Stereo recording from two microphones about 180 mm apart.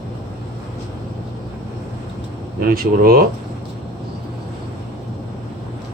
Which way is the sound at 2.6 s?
55° right (ahead or behind).